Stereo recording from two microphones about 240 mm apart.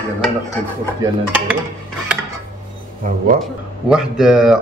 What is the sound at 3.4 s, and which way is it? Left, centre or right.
Speech, centre.